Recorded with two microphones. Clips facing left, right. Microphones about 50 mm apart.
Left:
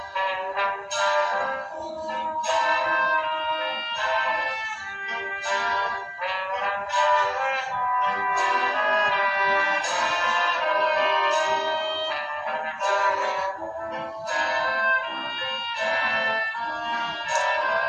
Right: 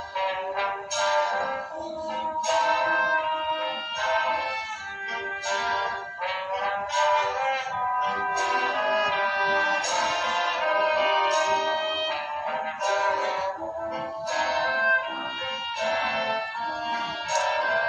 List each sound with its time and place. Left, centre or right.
0.6 s music: left
5.5 s music: left
7.2 s music: centre
7.9 s music: left
8.7 s brass instrument: left
10.3 s music: left
10.8 s music: left
12.9 s music: centre
14.3 s music: left